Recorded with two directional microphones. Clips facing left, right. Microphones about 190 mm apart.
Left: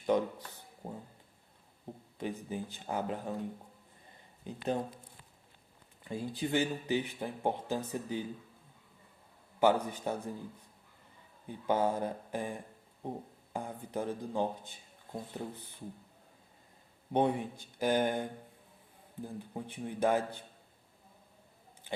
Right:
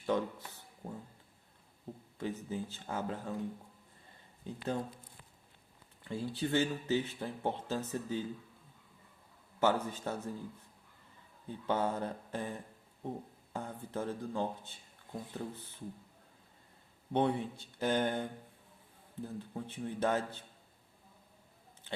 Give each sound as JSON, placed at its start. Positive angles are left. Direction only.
{"t": 0.0, "sound": "a sound", "side_deg": 15}
{"t": 2.1, "sound": "speech", "side_deg": 15}
{"t": 4.4, "sound": "speech", "side_deg": 15}
{"t": 6.1, "sound": "speech", "side_deg": 15}
{"t": 9.6, "sound": "speech", "side_deg": 15}
{"t": 11.4, "sound": "speech", "side_deg": 10}
{"t": 17.1, "sound": "speech", "side_deg": 15}